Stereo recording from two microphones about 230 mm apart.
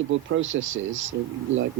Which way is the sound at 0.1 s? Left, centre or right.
Right.